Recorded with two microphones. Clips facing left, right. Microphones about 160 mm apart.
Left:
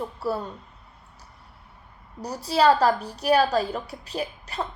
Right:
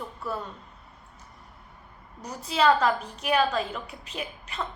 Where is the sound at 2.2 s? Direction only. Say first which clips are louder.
Left 3 dB; 35° left (ahead or behind).